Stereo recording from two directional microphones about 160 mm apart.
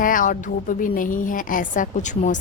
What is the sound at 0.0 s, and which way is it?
A woman's voice, 55° left (ahead or behind).